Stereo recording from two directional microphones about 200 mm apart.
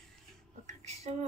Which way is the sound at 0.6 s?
35° right (ahead or behind).